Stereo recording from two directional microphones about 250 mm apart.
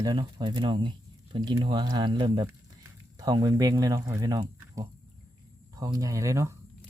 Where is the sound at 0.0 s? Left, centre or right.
Centre.